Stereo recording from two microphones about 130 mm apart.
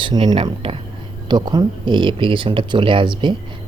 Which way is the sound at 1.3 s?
35° right (ahead or behind).